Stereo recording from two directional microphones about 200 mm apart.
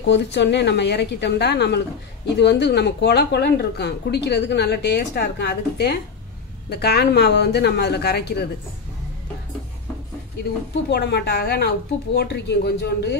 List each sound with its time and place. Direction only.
0.1 s speech: 60° left (ahead or behind)
10.9 s speech: 55° left (ahead or behind)